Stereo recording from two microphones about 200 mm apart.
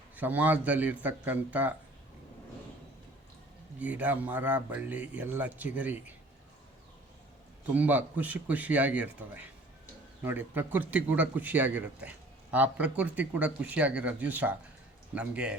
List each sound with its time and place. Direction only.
0.2 s a man's voice: 10° right (ahead or behind)
3.8 s a man's voice: 5° right (ahead or behind)
7.7 s a man's voice: 10° right (ahead or behind)